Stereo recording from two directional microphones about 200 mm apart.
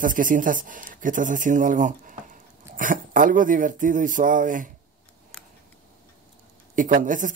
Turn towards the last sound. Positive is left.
turn(degrees=-40)  # may be behind; listen again after turning